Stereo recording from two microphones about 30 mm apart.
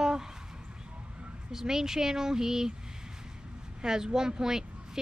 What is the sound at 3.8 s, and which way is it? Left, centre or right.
Speech, right.